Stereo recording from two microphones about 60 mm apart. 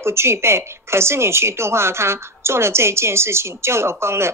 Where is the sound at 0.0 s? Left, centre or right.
Right.